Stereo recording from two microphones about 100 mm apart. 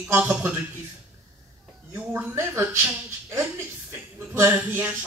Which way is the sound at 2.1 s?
25° right (ahead or behind).